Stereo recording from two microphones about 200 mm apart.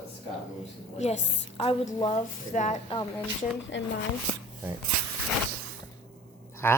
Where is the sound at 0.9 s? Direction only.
35° left (ahead or behind).